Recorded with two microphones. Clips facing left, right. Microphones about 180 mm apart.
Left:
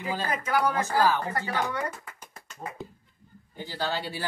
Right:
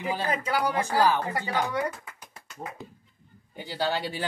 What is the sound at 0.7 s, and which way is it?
Speech, 15° right (ahead or behind).